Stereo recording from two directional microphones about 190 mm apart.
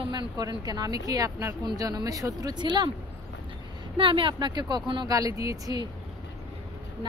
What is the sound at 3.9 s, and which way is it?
Speech, 25° right (ahead or behind).